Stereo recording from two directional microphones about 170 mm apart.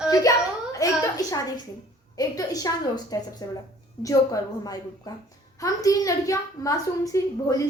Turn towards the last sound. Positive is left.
turn(degrees=20)  # may be behind; listen again after turning